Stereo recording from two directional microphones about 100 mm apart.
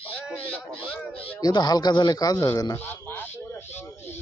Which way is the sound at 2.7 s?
20° left (ahead or behind).